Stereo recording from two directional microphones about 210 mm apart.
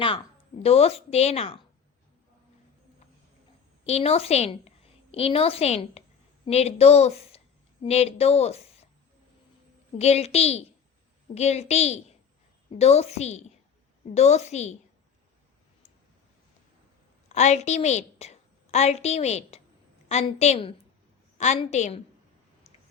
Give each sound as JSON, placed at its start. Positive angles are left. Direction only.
{"t": 0.6, "sound": "speech", "side_deg": 30}
{"t": 3.8, "sound": "speech", "side_deg": 30}
{"t": 10.0, "sound": "a woman's voice", "side_deg": 30}
{"t": 17.2, "sound": "a woman's voice", "side_deg": 35}